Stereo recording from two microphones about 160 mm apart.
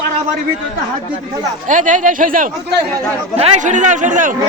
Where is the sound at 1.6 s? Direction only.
55° right (ahead or behind).